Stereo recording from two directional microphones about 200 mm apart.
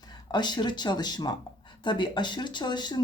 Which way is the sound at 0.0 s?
20° left (ahead or behind).